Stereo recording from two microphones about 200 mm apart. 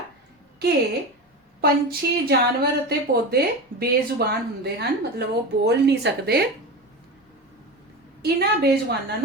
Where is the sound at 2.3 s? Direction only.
50° right (ahead or behind).